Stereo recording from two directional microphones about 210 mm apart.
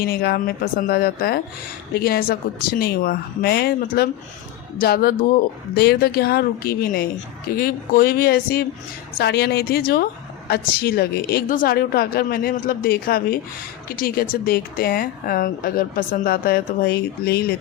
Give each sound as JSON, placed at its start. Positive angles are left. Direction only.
{"t": 0.0, "sound": "speech", "side_deg": 50}